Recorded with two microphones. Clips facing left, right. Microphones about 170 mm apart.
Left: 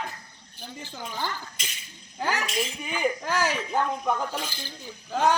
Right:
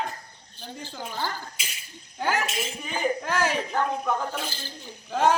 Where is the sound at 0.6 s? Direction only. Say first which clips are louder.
Right 1 dB; 10° left (ahead or behind).